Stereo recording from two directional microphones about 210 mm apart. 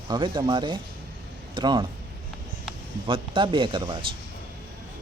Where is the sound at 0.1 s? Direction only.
20° right (ahead or behind).